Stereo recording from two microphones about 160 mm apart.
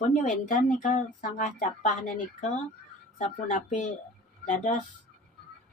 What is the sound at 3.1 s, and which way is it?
Speech, 50° left (ahead or behind).